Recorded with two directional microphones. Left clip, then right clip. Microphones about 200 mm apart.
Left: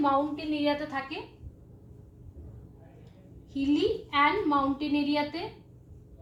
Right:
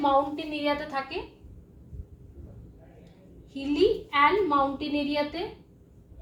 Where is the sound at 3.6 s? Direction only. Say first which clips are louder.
Right 3 dB; 15° right (ahead or behind).